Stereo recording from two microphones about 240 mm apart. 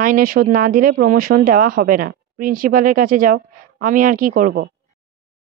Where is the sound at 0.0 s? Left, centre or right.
Right.